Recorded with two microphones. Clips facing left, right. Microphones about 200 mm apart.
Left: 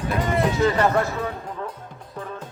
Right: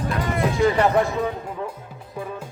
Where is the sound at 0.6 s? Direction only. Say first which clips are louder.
Right 3 dB; 15° right (ahead or behind).